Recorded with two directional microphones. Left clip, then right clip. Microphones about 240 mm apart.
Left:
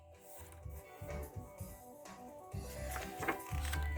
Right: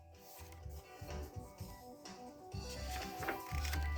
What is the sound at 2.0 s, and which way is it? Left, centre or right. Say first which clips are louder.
Music: left 3 dB; left.